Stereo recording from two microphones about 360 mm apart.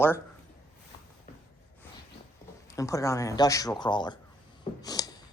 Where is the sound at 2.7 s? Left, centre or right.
Centre.